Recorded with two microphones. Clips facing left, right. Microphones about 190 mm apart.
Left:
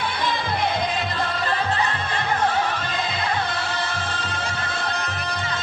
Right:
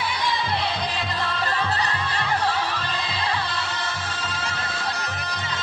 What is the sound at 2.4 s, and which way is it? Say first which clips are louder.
Music: left 3 dB; 50° left (ahead or behind).